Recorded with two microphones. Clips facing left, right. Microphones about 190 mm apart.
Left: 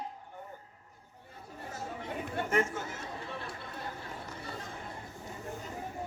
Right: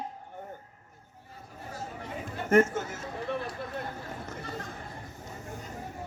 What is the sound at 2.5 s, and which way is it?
Speech, 45° right (ahead or behind).